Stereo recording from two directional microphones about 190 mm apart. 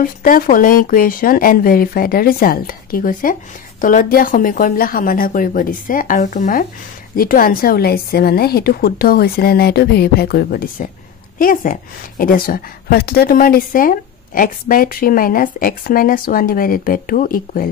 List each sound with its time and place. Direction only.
0.0 s a woman's voice: 45° left (ahead or behind)